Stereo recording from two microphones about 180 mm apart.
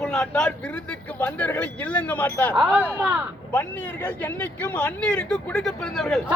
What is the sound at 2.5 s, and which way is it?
Speech, 10° right (ahead or behind).